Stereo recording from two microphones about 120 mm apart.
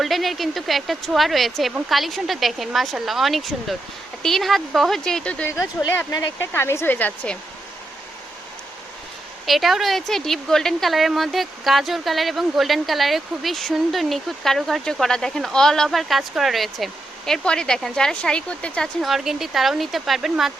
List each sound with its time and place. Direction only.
0.0 s a woman's voice: centre (ahead or behind)
6.1 s speech: 30° left (ahead or behind); by 7.3 s 15° left (ahead or behind)
9.5 s a woman's voice: centre (ahead or behind)